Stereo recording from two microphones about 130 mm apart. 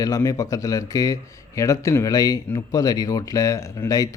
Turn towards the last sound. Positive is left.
turn(degrees=25)  # may be behind; listen again after turning